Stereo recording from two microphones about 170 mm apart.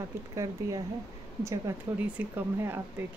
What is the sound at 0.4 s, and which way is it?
Speech, 20° right (ahead or behind).